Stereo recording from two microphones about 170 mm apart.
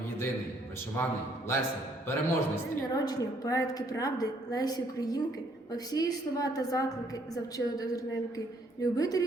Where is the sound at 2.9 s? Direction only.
25° left (ahead or behind).